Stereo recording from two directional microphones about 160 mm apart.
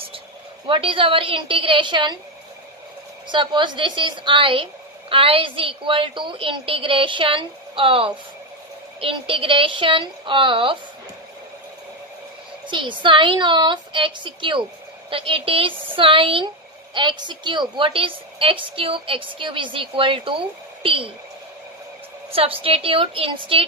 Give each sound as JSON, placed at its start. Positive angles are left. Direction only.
{"t": 0.7, "sound": "a woman's voice", "side_deg": -35}
{"t": 3.3, "sound": "a woman's voice", "side_deg": -30}
{"t": 12.6, "sound": "a woman's voice", "side_deg": -30}
{"t": 22.3, "sound": "a woman's voice", "side_deg": -35}